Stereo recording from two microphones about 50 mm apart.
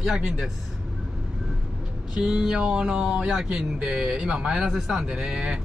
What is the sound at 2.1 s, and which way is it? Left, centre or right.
Speech, centre.